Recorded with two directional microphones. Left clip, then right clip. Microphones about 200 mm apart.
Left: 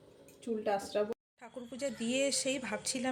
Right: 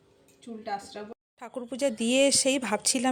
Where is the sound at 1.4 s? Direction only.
45° right (ahead or behind).